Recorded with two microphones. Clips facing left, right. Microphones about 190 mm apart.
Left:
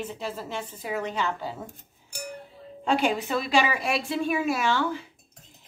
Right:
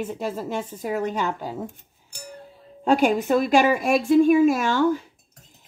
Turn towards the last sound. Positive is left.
turn(degrees=-45)  # may be behind; listen again after turning